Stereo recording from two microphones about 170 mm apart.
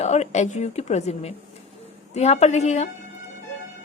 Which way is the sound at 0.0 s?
40° left (ahead or behind).